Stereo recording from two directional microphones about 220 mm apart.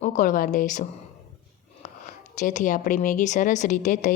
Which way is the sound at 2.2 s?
35° left (ahead or behind).